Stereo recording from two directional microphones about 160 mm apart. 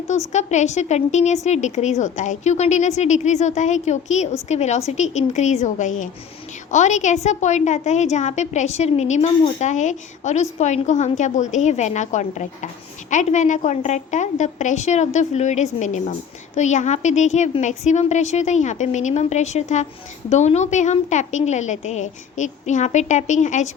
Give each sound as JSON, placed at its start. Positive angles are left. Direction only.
{"t": 0.3, "sound": "a woman's voice", "side_deg": 45}